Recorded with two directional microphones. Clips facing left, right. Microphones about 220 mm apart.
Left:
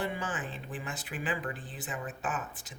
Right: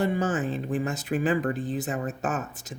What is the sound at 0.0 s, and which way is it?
Speech, 40° right (ahead or behind).